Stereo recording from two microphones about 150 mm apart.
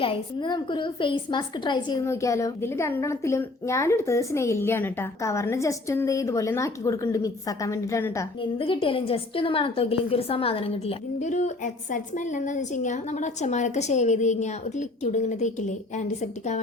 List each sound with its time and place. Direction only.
0.0 s a woman's voice: 35° left (ahead or behind)
8.4 s a woman's voice: 35° left (ahead or behind)
11.3 s a woman's voice: 55° left (ahead or behind)